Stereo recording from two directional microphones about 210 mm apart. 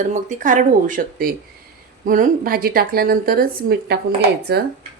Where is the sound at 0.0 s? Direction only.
35° right (ahead or behind).